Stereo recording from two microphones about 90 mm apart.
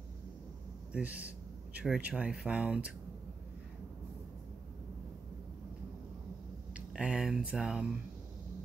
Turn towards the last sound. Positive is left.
turn(degrees=-5)  # may be behind; listen again after turning